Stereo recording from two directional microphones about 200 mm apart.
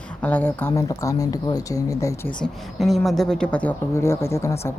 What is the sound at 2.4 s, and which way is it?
A woman's voice, centre (ahead or behind).